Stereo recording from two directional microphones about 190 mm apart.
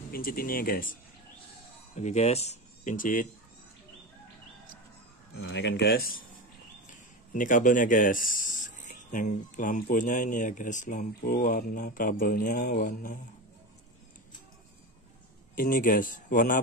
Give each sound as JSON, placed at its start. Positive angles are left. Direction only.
{"t": 0.1, "sound": "speech", "side_deg": 50}
{"t": 2.0, "sound": "speech", "side_deg": 35}
{"t": 5.5, "sound": "speech", "side_deg": 70}
{"t": 7.3, "sound": "speech", "side_deg": 45}
{"t": 15.5, "sound": "speech", "side_deg": 50}